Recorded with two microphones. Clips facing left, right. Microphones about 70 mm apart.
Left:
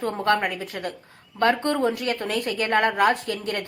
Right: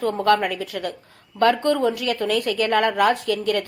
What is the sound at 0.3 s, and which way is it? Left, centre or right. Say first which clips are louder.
A woman's voice: right 3 dB; left.